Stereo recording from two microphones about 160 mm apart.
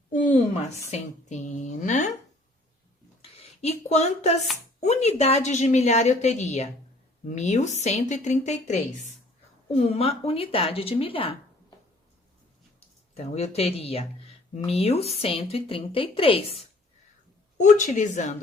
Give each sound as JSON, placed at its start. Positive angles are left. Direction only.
{"t": 0.9, "sound": "a woman's voice", "side_deg": 45}
{"t": 1.8, "sound": "a sound", "side_deg": 50}
{"t": 3.2, "sound": "a sound", "side_deg": 40}
{"t": 4.8, "sound": "a woman's voice", "side_deg": 45}
{"t": 13.1, "sound": "speech", "side_deg": 40}
{"t": 17.6, "sound": "a woman's voice", "side_deg": 50}